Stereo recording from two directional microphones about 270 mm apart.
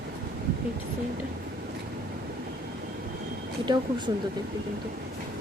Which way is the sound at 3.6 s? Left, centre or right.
Centre.